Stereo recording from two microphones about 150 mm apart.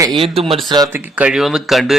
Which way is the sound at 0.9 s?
10° right (ahead or behind).